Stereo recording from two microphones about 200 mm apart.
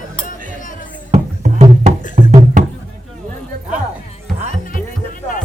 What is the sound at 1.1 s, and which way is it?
Music, 35° right (ahead or behind).